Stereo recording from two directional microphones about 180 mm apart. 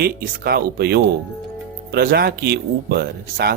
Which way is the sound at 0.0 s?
60° right (ahead or behind).